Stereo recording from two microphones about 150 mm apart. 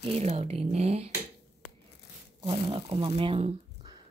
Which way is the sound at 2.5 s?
40° right (ahead or behind).